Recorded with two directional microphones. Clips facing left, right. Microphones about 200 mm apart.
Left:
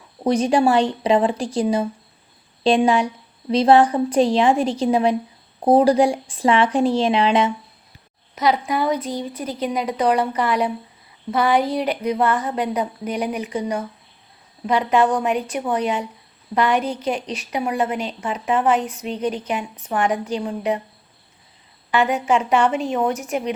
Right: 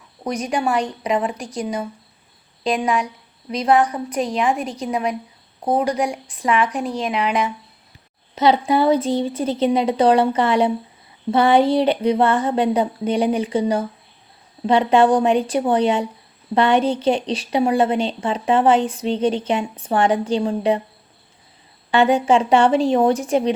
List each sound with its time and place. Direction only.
0.3 s a woman's voice: 30° left (ahead or behind)
8.4 s a woman's voice: 30° right (ahead or behind)
21.9 s a woman's voice: 30° right (ahead or behind)